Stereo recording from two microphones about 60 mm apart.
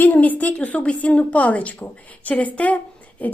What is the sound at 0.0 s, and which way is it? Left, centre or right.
A woman's voice, left.